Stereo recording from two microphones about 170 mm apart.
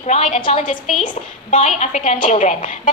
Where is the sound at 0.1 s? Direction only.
40° left (ahead or behind).